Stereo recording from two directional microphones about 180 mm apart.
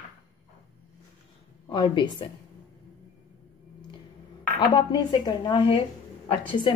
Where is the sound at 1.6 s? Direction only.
25° left (ahead or behind).